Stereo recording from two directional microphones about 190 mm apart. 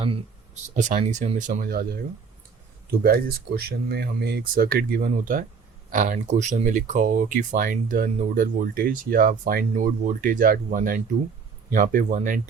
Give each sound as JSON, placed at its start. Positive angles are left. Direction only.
{"t": 0.8, "sound": "speech", "side_deg": -40}
{"t": 3.0, "sound": "speech", "side_deg": -55}